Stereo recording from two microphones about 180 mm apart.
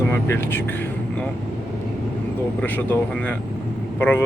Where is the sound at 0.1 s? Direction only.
10° left (ahead or behind).